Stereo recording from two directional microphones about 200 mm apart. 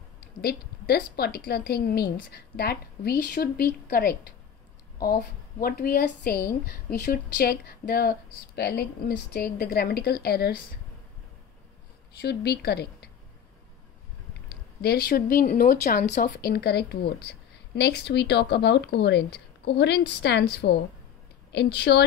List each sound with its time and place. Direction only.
0.2 s a woman's voice: 50° left (ahead or behind)
12.2 s a woman's voice: 55° left (ahead or behind)
14.8 s a woman's voice: 50° left (ahead or behind)